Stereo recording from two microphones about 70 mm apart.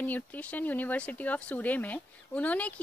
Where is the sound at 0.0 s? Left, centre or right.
Left.